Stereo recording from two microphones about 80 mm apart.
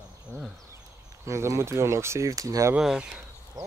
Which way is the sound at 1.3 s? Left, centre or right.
Right.